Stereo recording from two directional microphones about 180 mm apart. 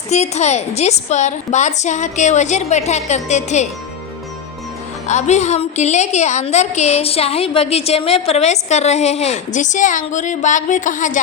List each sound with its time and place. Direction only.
0.1 s a woman's voice: 40° left (ahead or behind)
5.0 s a woman's voice: 40° left (ahead or behind)